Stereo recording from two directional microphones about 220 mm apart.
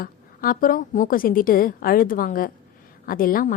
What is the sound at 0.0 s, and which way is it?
A woman's voice, 40° left (ahead or behind).